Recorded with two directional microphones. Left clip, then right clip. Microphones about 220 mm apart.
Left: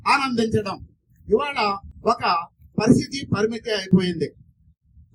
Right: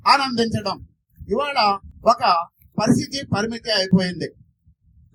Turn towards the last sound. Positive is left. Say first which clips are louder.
# even
turn(degrees=-35)  # may be behind; listen again after turning